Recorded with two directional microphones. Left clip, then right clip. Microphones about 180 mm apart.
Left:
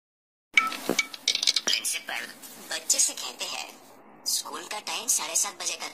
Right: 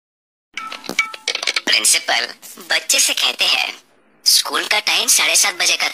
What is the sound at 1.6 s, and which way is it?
Speech, 50° right (ahead or behind).